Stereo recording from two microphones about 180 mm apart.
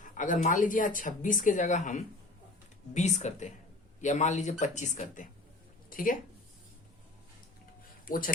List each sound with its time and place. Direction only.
0.0 s speech: 45° left (ahead or behind)
8.0 s speech: 50° left (ahead or behind)